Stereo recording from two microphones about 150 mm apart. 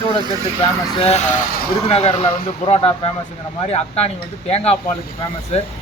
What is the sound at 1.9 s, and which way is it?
Speech, 40° left (ahead or behind).